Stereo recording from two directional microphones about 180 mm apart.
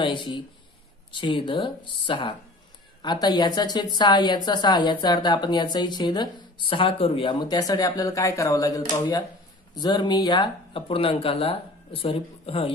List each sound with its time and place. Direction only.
0.0 s speech: 25° left (ahead or behind)